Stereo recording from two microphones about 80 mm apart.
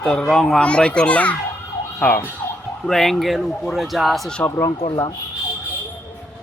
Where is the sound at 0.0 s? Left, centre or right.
Centre.